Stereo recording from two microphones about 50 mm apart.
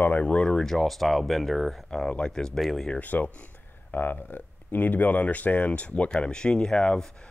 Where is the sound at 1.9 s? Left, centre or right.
Centre.